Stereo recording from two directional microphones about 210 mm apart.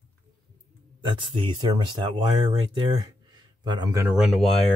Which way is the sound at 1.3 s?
20° right (ahead or behind).